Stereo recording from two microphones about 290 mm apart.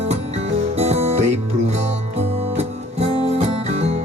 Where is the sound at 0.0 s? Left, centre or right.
Right.